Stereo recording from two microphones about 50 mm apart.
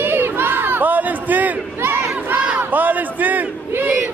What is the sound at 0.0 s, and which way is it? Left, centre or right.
Crowd, right.